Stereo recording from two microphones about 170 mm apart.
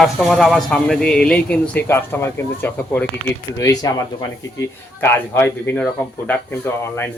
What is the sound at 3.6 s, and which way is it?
Speech, 20° left (ahead or behind).